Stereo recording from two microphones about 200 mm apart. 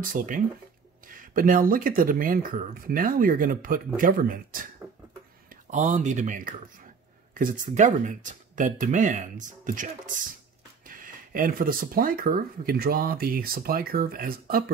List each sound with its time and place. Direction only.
0.2 s speech: 40° right (ahead or behind)